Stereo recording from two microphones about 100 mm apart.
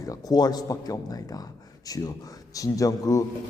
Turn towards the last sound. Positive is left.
turn(degrees=35)  # may be behind; listen again after turning